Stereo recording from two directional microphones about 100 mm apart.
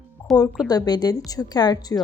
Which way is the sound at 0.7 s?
40° left (ahead or behind).